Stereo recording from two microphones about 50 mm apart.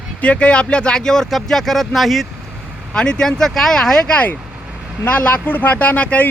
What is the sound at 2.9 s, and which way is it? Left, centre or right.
Speech, centre.